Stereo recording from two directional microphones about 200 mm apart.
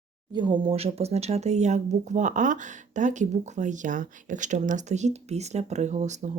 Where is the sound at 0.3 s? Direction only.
25° right (ahead or behind).